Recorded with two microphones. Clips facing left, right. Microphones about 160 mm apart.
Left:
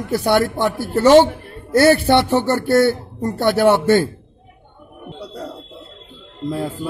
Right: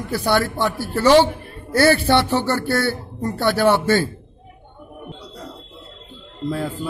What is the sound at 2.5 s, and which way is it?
Speech, 20° left (ahead or behind).